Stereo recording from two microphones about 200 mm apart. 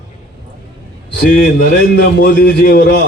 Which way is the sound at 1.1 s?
50° left (ahead or behind).